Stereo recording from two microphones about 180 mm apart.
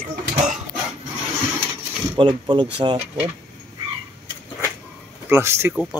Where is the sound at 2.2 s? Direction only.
25° right (ahead or behind).